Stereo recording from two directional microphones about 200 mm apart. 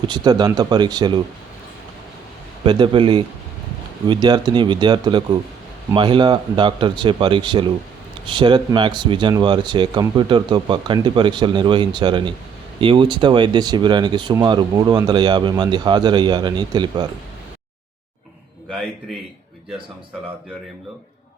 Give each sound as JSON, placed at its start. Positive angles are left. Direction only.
{"t": 0.1, "sound": "speech", "side_deg": -20}
{"t": 2.6, "sound": "speech", "side_deg": -25}